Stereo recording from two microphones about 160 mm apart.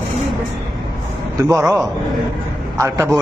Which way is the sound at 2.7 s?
20° right (ahead or behind).